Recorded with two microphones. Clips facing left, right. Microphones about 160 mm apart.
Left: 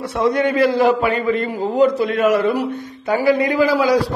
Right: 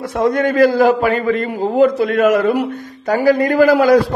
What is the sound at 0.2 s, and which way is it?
A man's voice, 45° right (ahead or behind).